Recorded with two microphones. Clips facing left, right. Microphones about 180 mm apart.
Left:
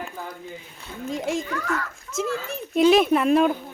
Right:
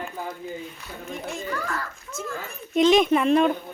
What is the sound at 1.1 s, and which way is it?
A child's voice, 90° left.